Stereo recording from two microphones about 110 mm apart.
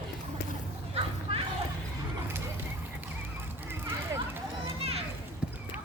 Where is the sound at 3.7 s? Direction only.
20° right (ahead or behind).